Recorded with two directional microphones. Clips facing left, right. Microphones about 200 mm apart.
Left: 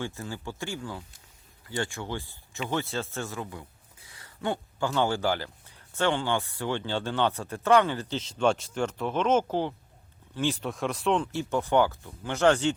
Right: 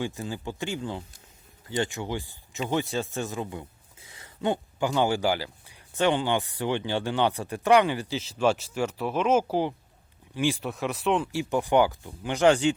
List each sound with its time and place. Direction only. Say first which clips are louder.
0.0 s a man's voice: right 3 dB; 15° right (ahead or behind)